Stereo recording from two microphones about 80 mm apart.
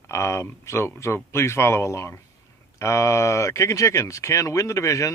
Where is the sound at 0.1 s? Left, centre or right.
Left.